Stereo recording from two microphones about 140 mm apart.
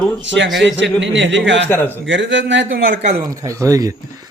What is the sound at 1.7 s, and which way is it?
Speech, 15° left (ahead or behind).